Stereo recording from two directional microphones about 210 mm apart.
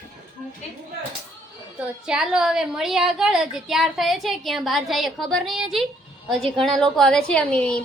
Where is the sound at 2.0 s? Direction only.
5° right (ahead or behind).